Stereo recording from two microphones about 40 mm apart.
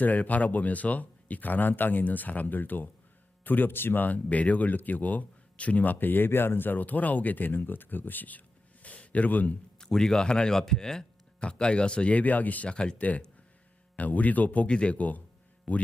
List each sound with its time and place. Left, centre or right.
0.0 s speech: left
4.0 s speech: left
8.8 s a sound: left
9.7 s speech: centre
11.3 s speech: left
12.1 s speech: left
12.6 s speech: left
13.0 s speech: left
14.7 s speech: left
14.9 s speech: left